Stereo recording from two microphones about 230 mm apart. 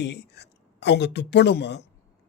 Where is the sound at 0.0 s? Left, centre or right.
Left.